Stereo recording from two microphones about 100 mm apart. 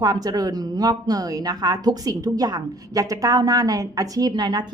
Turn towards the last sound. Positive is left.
turn(degrees=-45)  # may be behind; listen again after turning